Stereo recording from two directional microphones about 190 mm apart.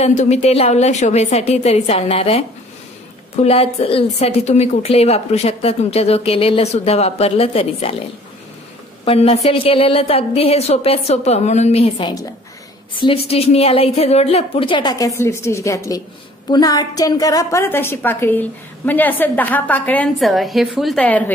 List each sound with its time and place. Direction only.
0.0 s a woman's voice: 35° left (ahead or behind)
9.0 s a woman's voice: 30° left (ahead or behind)
13.3 s a woman's voice: 30° left (ahead or behind); by 21.2 s 5° left (ahead or behind)